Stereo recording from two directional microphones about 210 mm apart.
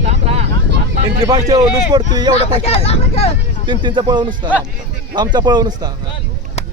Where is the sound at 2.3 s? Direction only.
30° left (ahead or behind).